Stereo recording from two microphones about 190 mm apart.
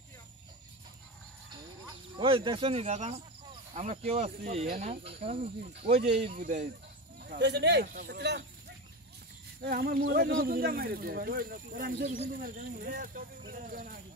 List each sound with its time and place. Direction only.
1.5 s a sound: 25° right (ahead or behind)
3.7 s speech: 40° right (ahead or behind)
5.7 s speech: 60° right (ahead or behind)
5.9 s speech: 30° right (ahead or behind)
7.2 s speech: 60° right (ahead or behind)
9.6 s speech: 50° right (ahead or behind)
10.0 s speech: 65° right (ahead or behind); by 14.0 s 50° right (ahead or behind)